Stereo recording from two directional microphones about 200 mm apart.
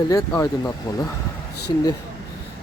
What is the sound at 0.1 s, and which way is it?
Speech, 15° left (ahead or behind).